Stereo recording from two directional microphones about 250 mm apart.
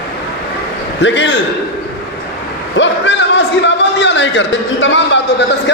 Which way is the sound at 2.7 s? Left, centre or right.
Left.